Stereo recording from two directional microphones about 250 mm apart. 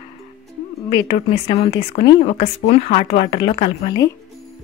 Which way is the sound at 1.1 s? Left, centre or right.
Left.